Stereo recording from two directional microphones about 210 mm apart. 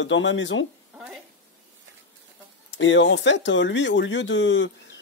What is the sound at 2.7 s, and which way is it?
Speech, 60° left (ahead or behind).